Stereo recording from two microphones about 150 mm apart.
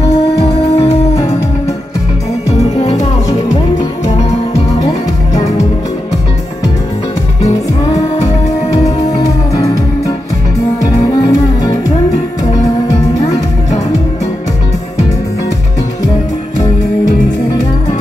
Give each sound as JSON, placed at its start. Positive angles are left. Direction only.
{"t": 0.7, "sound": "music", "side_deg": 45}
{"t": 2.5, "sound": "music", "side_deg": 45}
{"t": 5.3, "sound": "music", "side_deg": 45}
{"t": 8.7, "sound": "music", "side_deg": 25}
{"t": 10.9, "sound": "music", "side_deg": 25}